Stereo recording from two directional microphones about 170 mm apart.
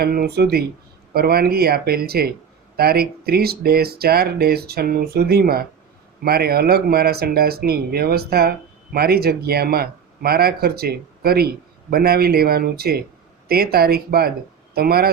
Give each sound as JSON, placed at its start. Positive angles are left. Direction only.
{"t": 0.0, "sound": "speech", "side_deg": -65}